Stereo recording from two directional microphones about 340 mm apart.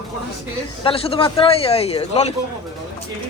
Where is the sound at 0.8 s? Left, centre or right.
Centre.